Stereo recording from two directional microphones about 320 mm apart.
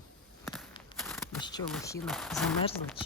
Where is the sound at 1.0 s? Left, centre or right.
Centre.